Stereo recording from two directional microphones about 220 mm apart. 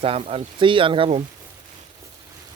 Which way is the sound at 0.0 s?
25° right (ahead or behind).